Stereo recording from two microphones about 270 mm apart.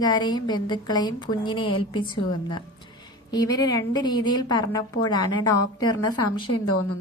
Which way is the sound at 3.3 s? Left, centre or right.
Centre.